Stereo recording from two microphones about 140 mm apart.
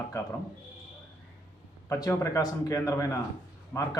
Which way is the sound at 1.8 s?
25° left (ahead or behind).